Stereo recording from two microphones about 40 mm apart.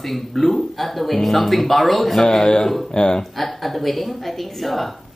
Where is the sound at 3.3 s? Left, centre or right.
Centre.